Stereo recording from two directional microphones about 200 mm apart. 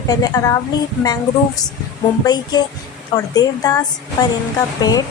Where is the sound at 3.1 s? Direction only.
20° left (ahead or behind).